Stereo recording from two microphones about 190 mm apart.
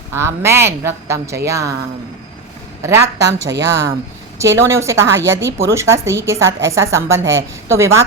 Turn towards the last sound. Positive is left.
turn(degrees=-15)  # may be behind; listen again after turning